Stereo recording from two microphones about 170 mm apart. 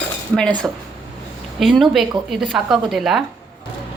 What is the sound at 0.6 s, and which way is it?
Speech, 10° right (ahead or behind).